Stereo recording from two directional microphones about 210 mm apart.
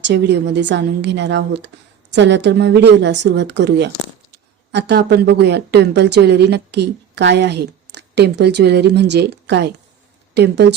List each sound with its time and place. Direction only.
0.0 s speech: 55° right (ahead or behind)